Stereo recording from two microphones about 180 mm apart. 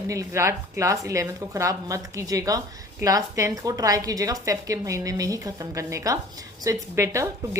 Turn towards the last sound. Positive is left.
turn(degrees=-15)  # may be behind; listen again after turning